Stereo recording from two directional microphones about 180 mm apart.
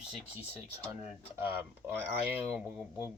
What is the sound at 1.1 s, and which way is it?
Speech, 10° right (ahead or behind).